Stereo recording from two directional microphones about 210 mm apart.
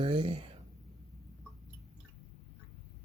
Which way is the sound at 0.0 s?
25° right (ahead or behind).